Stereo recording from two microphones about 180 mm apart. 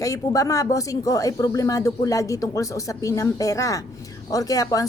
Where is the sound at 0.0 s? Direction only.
20° left (ahead or behind).